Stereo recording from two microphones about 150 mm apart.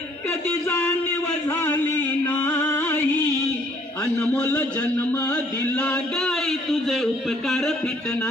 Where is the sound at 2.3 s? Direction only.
10° left (ahead or behind).